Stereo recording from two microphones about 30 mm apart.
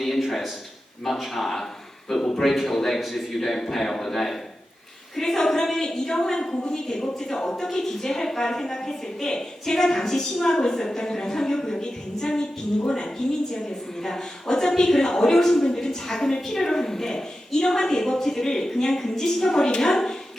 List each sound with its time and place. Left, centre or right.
1.0 s a woman's voice: centre